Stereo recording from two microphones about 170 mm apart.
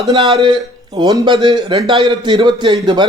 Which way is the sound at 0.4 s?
25° right (ahead or behind).